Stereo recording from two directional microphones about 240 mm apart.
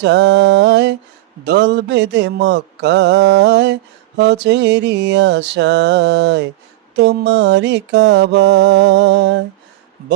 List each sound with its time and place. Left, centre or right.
0.0 s mantra: right